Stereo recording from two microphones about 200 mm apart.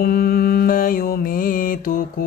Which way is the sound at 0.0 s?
50° left (ahead or behind).